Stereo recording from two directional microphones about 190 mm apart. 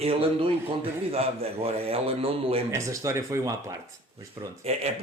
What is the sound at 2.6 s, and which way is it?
Speech, 15° right (ahead or behind).